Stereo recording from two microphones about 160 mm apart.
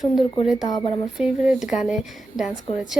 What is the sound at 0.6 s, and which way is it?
Speech, 25° left (ahead or behind).